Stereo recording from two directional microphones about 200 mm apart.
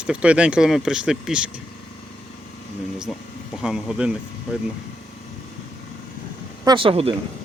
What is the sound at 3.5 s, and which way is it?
Speech, centre (ahead or behind).